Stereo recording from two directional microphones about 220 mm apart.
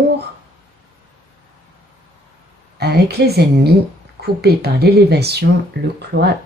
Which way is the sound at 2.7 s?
45° right (ahead or behind).